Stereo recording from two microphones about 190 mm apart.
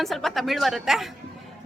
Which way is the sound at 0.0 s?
Centre (ahead or behind).